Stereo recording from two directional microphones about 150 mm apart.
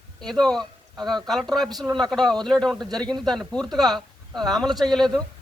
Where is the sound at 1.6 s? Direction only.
25° right (ahead or behind).